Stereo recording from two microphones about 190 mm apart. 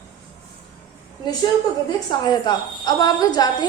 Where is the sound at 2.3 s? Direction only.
20° left (ahead or behind).